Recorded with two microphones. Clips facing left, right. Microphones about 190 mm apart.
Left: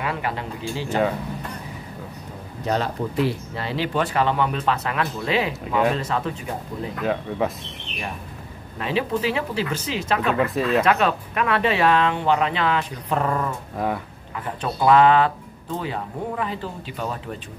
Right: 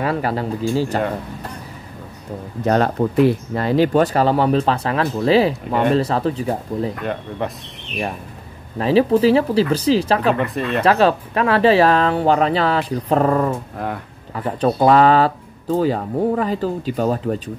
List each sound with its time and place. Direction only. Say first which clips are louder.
0.0 s speech: right 7 dB; 40° right (ahead or behind)
2.6 s speech: right 7 dB; 55° right (ahead or behind); by 6.9 s 35° right (ahead or behind)
7.0 s speech: left 1 dB; centre (ahead or behind)
8.7 s speech: right 9 dB; 35° right (ahead or behind)
10.3 s speech: even; centre (ahead or behind)
10.8 s speech: right 9 dB; 30° right (ahead or behind)
13.7 s speech: left 1 dB; centre (ahead or behind)
14.3 s speech: right 9 dB; 35° right (ahead or behind)